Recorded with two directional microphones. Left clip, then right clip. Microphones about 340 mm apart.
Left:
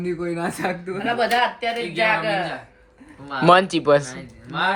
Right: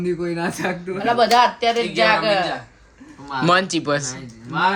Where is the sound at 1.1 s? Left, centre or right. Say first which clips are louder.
Right 5 dB; right.